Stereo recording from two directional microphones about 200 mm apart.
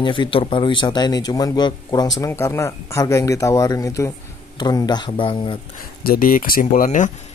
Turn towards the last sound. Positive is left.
turn(degrees=40)  # may be behind; listen again after turning